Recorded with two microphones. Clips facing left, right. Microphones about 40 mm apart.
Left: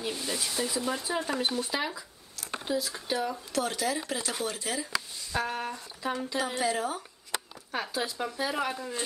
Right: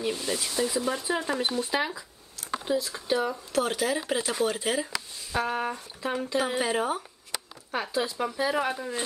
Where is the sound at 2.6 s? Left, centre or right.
Centre.